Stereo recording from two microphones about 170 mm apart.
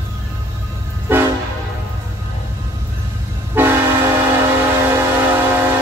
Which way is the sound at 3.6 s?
10° right (ahead or behind).